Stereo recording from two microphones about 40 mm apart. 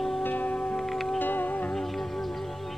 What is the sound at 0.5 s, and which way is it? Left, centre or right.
Wind chime, centre.